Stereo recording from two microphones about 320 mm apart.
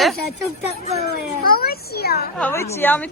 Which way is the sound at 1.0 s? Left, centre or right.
Left.